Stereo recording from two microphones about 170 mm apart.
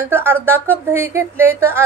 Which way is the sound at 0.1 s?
15° right (ahead or behind).